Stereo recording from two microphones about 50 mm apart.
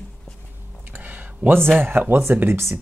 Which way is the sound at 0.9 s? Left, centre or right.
Right.